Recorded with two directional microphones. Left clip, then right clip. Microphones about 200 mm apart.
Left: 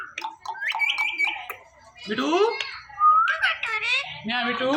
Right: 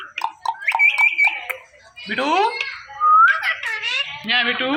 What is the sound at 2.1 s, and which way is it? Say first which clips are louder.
Speech: right 5 dB; 30° right (ahead or behind).